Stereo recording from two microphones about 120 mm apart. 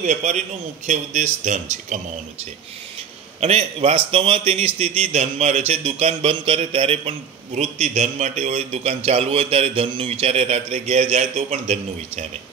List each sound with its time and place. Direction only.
0.0 s a man's voice: 80° right
3.3 s a man's voice: 60° right (ahead or behind)
7.5 s a man's voice: 70° right (ahead or behind)